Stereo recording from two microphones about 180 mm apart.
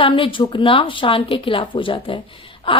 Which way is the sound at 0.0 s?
30° left (ahead or behind).